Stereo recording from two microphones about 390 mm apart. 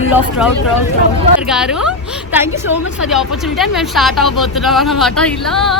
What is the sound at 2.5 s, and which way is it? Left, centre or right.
Speech, left.